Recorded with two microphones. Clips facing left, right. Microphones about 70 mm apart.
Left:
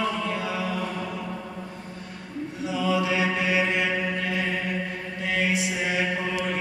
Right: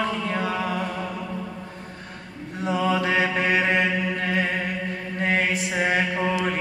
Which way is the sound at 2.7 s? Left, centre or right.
Right.